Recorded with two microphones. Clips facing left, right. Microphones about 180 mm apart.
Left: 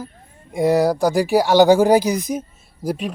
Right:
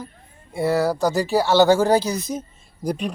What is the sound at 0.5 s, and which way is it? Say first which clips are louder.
A man's voice: left 4 dB; 15° left (ahead or behind).